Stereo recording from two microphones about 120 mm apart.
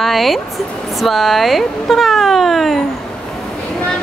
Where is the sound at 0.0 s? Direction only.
Centre (ahead or behind).